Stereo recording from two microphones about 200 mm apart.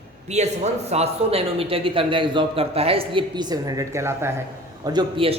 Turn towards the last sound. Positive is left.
turn(degrees=-25)  # may be behind; listen again after turning